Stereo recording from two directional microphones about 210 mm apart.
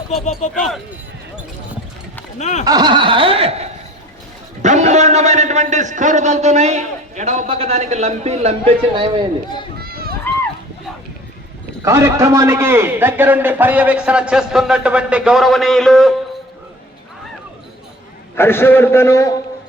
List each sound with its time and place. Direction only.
0.1 s speech: 35° left (ahead or behind)
2.4 s speech: 35° left (ahead or behind)
2.6 s snicker: 20° right (ahead or behind)
4.6 s a man's voice: 35° right (ahead or behind)
9.7 s run: 45° right (ahead or behind)
11.9 s a man's voice: 15° right (ahead or behind); by 16.1 s centre (ahead or behind)
18.3 s a man's voice: 10° left (ahead or behind)